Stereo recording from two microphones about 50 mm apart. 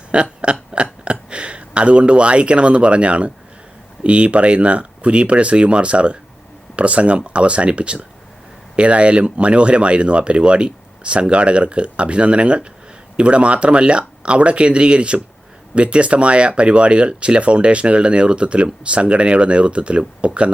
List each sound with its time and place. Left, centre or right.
0.1 s burping: right
0.7 s speech: right